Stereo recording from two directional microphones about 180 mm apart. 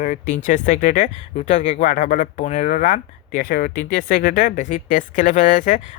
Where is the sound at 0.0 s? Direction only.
45° left (ahead or behind).